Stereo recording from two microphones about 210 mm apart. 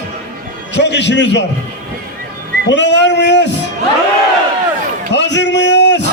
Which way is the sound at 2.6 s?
55° left (ahead or behind).